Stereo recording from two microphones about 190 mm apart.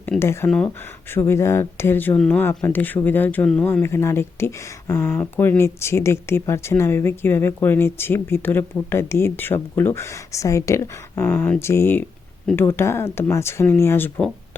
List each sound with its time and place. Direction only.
0.0 s speech: 10° left (ahead or behind)